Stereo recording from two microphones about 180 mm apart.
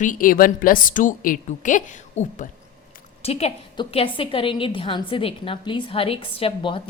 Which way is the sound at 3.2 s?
35° left (ahead or behind).